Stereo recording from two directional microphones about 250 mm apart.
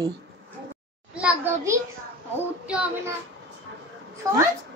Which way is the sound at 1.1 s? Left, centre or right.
Centre.